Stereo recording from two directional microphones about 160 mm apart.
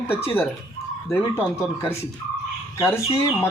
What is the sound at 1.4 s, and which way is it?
Speech, 5° right (ahead or behind).